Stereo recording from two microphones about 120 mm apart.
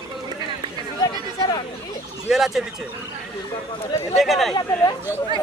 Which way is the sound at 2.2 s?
Centre (ahead or behind).